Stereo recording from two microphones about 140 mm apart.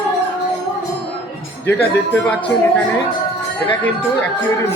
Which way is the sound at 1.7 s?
10° left (ahead or behind).